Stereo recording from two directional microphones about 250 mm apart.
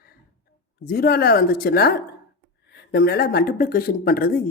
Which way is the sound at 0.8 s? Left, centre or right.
Left.